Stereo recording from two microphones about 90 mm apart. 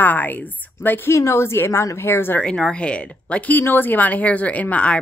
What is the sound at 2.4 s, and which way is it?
Speech, 10° left (ahead or behind).